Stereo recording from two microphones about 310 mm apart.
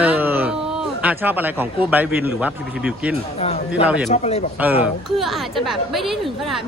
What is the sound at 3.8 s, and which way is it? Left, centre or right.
Speech, centre.